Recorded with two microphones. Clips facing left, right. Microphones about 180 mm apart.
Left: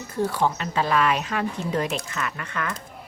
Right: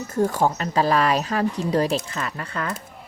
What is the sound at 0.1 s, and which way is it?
Speech, 45° right (ahead or behind).